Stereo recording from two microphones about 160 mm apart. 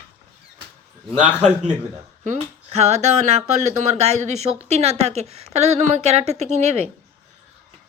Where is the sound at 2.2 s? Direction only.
50° right (ahead or behind).